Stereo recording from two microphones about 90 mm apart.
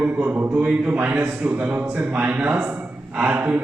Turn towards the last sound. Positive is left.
turn(degrees=-20)  # may be behind; listen again after turning